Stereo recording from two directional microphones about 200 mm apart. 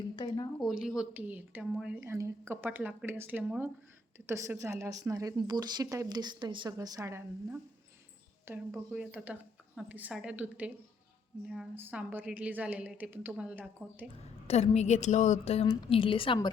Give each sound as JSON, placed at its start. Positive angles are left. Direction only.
{"t": 0.2, "sound": "a sound", "side_deg": 20}
{"t": 0.6, "sound": "speech", "side_deg": 0}
{"t": 14.4, "sound": "a woman's voice", "side_deg": 30}